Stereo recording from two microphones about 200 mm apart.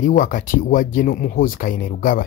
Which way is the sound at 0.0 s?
45° left (ahead or behind).